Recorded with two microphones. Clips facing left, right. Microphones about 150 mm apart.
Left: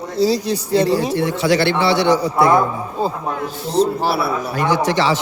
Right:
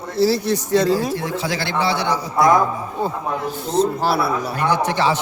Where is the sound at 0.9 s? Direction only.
75° left (ahead or behind).